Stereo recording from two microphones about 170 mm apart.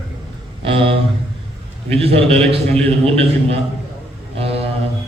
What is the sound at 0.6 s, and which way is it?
A man's voice, 30° right (ahead or behind).